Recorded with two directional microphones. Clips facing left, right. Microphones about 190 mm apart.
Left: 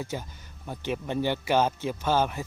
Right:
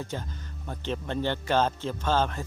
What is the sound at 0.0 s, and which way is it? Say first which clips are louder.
Speech: left 1 dB; 10° left (ahead or behind).